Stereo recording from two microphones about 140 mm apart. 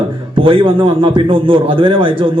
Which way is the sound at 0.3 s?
40° right (ahead or behind).